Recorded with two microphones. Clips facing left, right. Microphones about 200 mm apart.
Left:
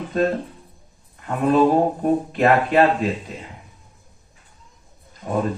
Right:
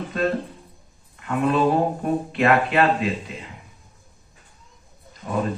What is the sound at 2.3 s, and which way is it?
Speech, 40° left (ahead or behind).